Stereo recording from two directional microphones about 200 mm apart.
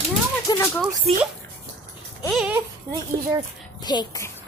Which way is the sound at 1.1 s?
30° right (ahead or behind).